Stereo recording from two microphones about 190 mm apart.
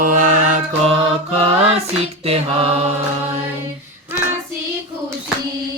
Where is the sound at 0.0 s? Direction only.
45° right (ahead or behind).